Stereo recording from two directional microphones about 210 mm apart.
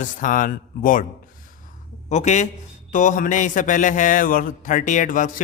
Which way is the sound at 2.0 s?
35° left (ahead or behind).